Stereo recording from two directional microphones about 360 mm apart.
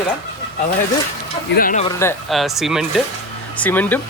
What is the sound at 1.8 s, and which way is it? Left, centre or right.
Speech, centre.